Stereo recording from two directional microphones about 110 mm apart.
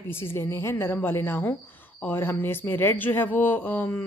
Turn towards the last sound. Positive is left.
turn(degrees=15)  # may be behind; listen again after turning